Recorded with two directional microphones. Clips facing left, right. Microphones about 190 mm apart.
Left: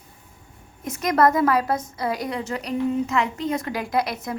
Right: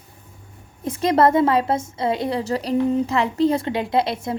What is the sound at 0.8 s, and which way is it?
A woman's voice, 30° right (ahead or behind).